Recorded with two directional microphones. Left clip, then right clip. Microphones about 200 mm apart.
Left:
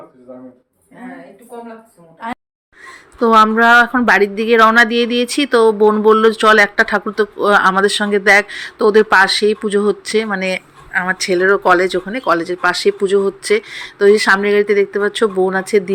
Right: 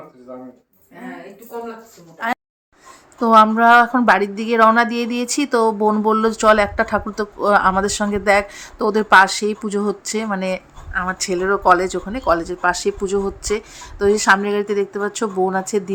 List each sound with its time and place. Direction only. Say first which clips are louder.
2.2 s speech: right 4 dB; centre (ahead or behind)